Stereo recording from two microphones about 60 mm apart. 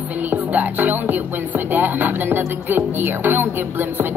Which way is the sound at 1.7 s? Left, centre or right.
Right.